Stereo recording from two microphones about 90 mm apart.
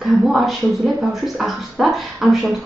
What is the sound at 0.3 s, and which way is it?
Speech, 5° right (ahead or behind).